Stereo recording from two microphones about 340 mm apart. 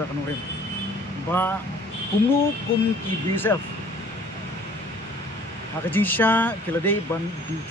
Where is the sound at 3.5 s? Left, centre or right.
Centre.